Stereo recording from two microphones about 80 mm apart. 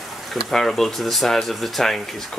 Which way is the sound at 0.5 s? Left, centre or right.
Centre.